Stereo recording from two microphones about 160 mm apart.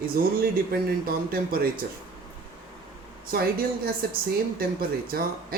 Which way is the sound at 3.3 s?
70° right (ahead or behind).